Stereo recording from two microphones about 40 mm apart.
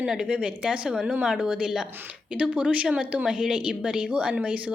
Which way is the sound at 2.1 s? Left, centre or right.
Right.